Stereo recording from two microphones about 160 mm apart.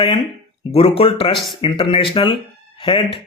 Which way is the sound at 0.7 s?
40° left (ahead or behind).